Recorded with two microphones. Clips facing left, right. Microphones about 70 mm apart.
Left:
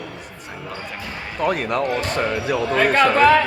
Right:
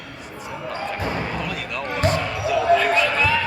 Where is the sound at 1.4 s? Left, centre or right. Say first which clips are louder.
Left 8 dB; left.